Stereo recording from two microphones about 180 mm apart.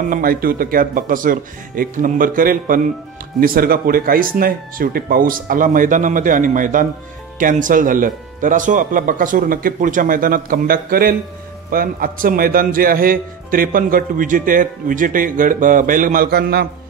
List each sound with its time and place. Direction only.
0.1 s a man's voice: 55° right (ahead or behind)